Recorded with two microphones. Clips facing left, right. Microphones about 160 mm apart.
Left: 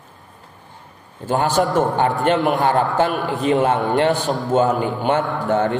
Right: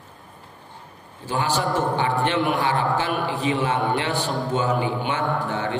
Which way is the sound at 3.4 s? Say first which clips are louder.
Left 7 dB; 50° left (ahead or behind).